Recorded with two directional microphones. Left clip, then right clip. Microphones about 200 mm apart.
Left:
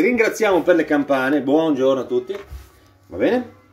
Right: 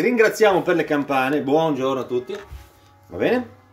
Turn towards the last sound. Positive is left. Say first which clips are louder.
# left 2 dB
turn(degrees=-25)  # may be behind; listen again after turning